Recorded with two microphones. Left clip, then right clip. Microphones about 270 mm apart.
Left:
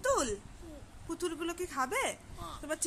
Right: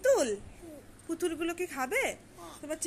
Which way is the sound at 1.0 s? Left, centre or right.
Centre.